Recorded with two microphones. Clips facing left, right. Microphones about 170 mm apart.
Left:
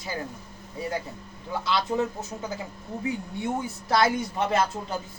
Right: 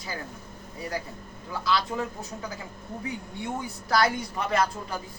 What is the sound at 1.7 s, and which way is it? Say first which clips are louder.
Speech: left 2 dB; 25° left (ahead or behind).